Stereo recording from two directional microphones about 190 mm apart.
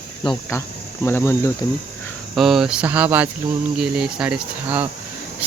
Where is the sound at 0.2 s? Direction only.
25° left (ahead or behind).